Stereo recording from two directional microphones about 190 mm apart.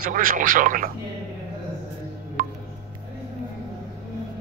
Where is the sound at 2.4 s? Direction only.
50° right (ahead or behind).